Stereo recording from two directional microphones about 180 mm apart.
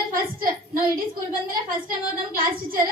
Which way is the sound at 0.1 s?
50° right (ahead or behind).